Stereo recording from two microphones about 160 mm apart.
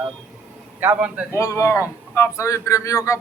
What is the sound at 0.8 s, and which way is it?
Speech, 10° right (ahead or behind).